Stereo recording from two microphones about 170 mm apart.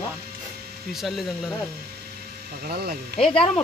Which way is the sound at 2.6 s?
65° right (ahead or behind).